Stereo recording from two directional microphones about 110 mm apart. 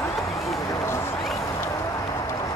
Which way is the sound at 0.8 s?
25° left (ahead or behind).